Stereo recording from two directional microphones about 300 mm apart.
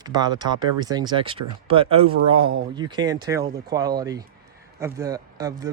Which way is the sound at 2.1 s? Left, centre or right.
Right.